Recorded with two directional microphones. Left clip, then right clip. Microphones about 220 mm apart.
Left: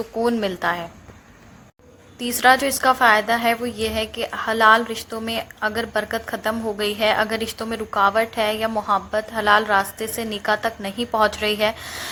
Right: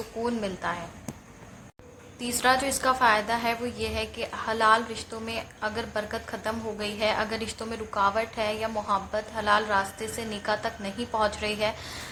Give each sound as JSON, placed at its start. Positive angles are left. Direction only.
{"t": 0.2, "sound": "a woman's voice", "side_deg": 35}
{"t": 2.1, "sound": "a woman's voice", "side_deg": 25}